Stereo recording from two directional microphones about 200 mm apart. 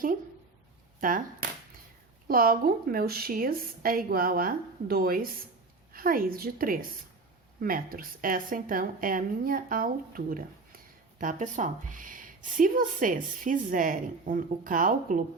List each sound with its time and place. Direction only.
0.9 s speech: 40° right (ahead or behind)
2.2 s a woman's voice: 45° right (ahead or behind)